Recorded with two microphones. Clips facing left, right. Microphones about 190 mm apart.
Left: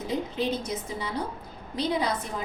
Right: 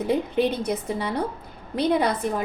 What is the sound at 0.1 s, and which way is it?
A woman's voice, 60° right (ahead or behind).